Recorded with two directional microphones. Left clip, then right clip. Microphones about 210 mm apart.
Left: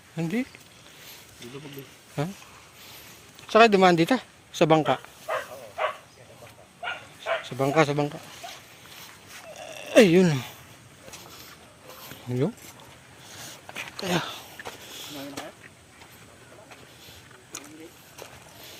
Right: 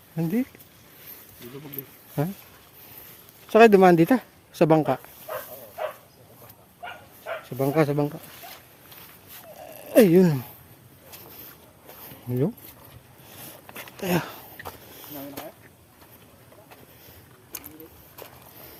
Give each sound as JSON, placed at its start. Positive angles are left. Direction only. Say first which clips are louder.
{"t": 0.2, "sound": "speech", "louder": "right 2 dB", "side_deg": -30}
{"t": 3.5, "sound": "dog", "louder": "right 2 dB", "side_deg": -40}
{"t": 6.8, "sound": "bow-wow", "louder": "left 5 dB", "side_deg": -35}
{"t": 7.6, "sound": "speech", "louder": "even", "side_deg": -30}
{"t": 9.6, "sound": "a sound", "louder": "even", "side_deg": -20}
{"t": 12.3, "sound": "speech", "louder": "right 1 dB", "side_deg": -15}
{"t": 13.9, "sound": "a sound", "louder": "right 1 dB", "side_deg": -30}